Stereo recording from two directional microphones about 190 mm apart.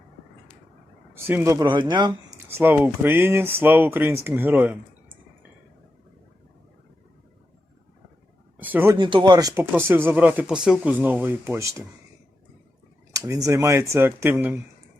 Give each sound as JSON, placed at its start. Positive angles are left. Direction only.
{"t": 1.1, "sound": "speech", "side_deg": -10}
{"t": 2.5, "sound": "speech", "side_deg": -10}
{"t": 8.5, "sound": "a sound", "side_deg": -10}
{"t": 9.0, "sound": "speech", "side_deg": -25}
{"t": 13.1, "sound": "speech", "side_deg": -15}